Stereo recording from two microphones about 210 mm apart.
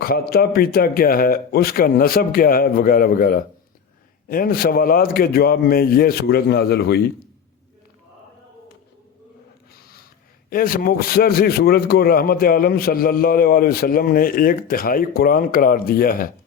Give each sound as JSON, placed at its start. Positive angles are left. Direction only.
{"t": 0.0, "sound": "a man's voice", "side_deg": 45}
{"t": 10.5, "sound": "a man's voice", "side_deg": 40}